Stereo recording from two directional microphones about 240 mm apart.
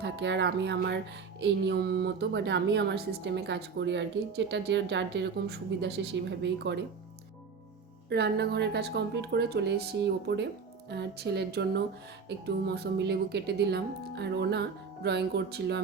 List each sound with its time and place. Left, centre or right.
0.0 s speech: right
8.1 s speech: right